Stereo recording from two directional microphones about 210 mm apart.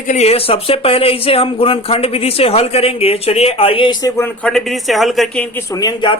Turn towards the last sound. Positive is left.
turn(degrees=20)  # may be behind; listen again after turning